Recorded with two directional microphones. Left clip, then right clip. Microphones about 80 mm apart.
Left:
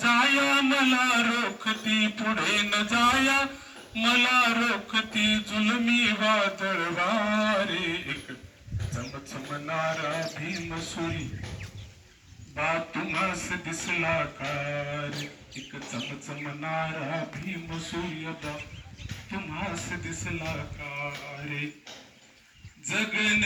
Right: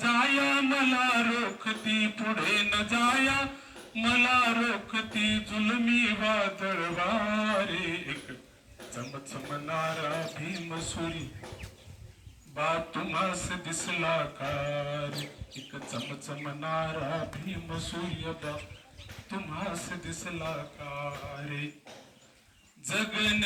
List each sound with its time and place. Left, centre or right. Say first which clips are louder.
0.0 s a man's voice: left 3 dB; left
9.0 s mantra: left 1 dB; left; by 10.6 s centre
12.5 s a man's voice: left 2 dB; centre
13.5 s bird: left 3 dB; centre
19.3 s a man's voice: left 2 dB; right
22.9 s a man's voice: left 3 dB; right